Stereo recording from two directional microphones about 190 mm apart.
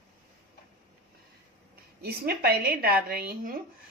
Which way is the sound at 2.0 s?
55° right (ahead or behind).